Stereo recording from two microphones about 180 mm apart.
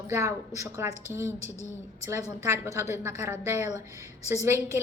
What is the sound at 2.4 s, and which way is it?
A woman's voice, 15° right (ahead or behind).